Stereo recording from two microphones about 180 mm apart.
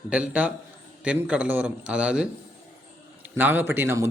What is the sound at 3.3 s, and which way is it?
Speech, 10° right (ahead or behind).